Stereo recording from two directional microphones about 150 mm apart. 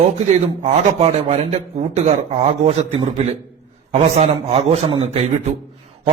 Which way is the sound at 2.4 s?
45° right (ahead or behind).